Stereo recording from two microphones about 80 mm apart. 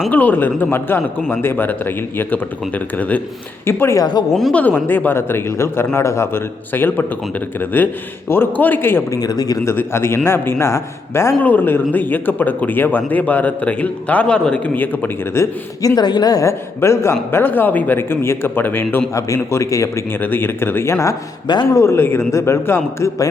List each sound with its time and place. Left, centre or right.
0.1 s speech: left
3.7 s a man's voice: left
3.9 s a woman's voice: left
4.5 s speech: centre
9.1 s speech: left
9.6 s a man's voice: left
11.4 s speech: left
15.4 s a man's voice: left
16.0 s a woman's voice: left
16.5 s speech: left
19.1 s a man's voice: left
20.1 s speech: left
21.4 s speech: left
21.8 s a man's voice: left